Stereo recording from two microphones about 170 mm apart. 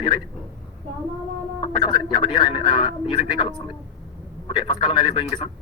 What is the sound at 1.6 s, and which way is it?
Speech, 25° left (ahead or behind).